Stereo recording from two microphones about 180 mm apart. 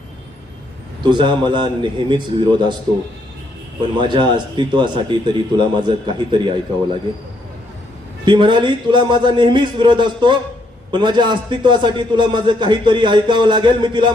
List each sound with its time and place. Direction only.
1.0 s a man's voice: 25° right (ahead or behind)
3.9 s a man's voice: 25° right (ahead or behind)
8.2 s a man's voice: 25° right (ahead or behind)